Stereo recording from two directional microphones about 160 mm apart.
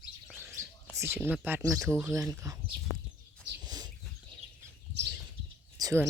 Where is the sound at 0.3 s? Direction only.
15° right (ahead or behind).